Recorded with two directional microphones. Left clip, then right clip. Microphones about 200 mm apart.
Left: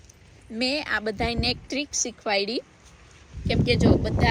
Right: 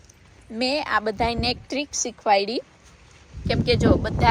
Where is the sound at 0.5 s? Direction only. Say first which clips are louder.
Right 3 dB; centre (ahead or behind).